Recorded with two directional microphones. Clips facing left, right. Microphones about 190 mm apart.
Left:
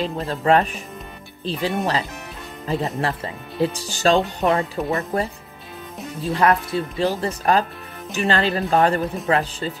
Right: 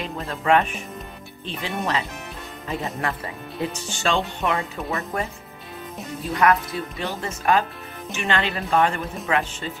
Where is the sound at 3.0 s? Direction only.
30° left (ahead or behind).